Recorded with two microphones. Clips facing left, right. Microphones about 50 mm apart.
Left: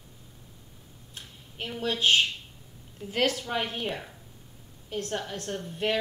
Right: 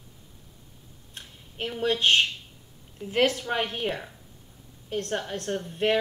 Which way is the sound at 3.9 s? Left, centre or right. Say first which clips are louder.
Right 3 dB; centre.